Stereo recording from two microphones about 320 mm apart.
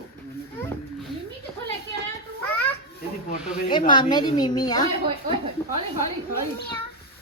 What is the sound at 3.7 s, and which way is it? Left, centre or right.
A child's voice, centre.